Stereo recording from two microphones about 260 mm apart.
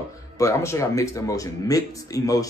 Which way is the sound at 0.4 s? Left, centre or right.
Centre.